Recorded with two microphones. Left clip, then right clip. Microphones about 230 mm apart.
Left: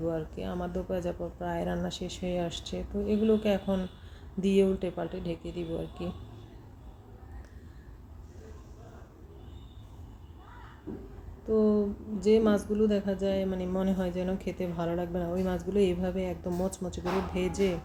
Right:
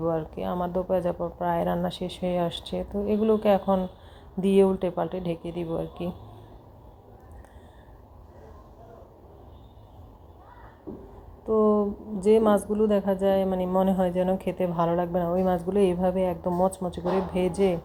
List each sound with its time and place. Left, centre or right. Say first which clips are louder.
0.1 s a woman's voice: right 6 dB; centre
11.4 s a woman's voice: right 4 dB; centre